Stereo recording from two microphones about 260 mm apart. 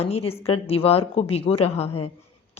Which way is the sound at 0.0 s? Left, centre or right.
Left.